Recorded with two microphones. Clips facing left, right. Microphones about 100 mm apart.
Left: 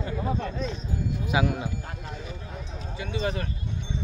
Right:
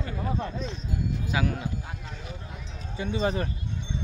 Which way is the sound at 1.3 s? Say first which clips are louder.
Left 4 dB; 15° left (ahead or behind).